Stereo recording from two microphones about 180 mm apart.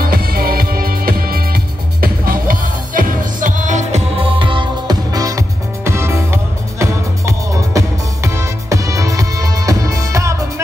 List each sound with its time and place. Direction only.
0.0 s music: 55° right (ahead or behind)
4.2 s music: 30° right (ahead or behind)